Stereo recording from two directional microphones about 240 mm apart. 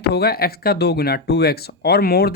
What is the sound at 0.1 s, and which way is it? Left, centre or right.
Speech, left.